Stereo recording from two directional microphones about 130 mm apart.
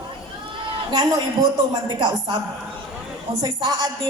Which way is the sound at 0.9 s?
35° right (ahead or behind).